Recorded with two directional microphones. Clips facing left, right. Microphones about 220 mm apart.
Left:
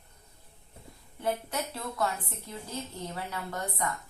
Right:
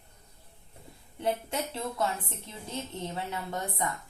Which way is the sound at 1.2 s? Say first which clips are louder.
Right 1 dB; 25° right (ahead or behind).